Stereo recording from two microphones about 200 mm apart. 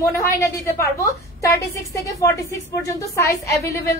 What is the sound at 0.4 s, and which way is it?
A woman's voice, 15° left (ahead or behind).